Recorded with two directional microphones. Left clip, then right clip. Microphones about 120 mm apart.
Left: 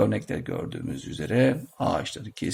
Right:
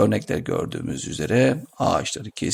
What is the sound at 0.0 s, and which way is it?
Speech, 40° right (ahead or behind).